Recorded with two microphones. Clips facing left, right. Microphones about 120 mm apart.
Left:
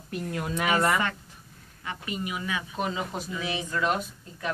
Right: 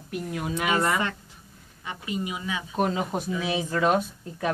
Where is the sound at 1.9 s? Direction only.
20° right (ahead or behind).